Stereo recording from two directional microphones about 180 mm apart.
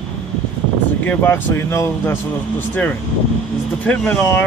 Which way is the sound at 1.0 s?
15° left (ahead or behind).